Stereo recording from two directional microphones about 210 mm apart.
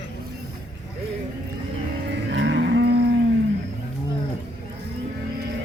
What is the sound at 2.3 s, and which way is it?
Livestock, 60° right (ahead or behind).